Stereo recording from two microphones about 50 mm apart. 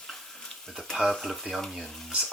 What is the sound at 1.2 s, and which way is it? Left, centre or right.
Speech, centre.